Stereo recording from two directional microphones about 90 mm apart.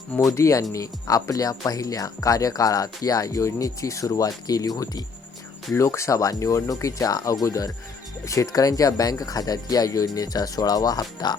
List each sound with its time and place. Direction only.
0.3 s speech: 35° left (ahead or behind)
5.7 s speech: 30° left (ahead or behind)